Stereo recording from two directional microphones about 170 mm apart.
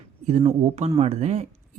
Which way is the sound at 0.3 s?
40° right (ahead or behind).